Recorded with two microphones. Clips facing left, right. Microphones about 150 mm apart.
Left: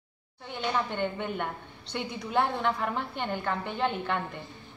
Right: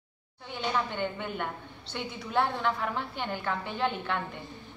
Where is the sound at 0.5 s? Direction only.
Centre (ahead or behind).